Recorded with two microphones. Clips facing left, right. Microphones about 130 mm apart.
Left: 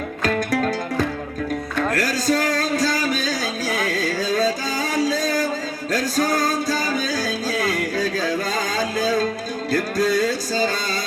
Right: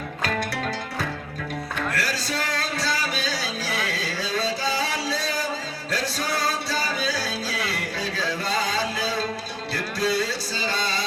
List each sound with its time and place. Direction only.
0.2 s music: 45° left (ahead or behind)
1.9 s music: 45° left (ahead or behind)